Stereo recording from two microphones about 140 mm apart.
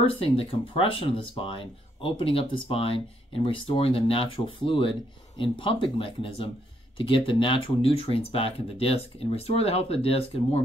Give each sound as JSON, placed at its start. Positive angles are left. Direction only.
{"t": 0.0, "sound": "speech", "side_deg": 40}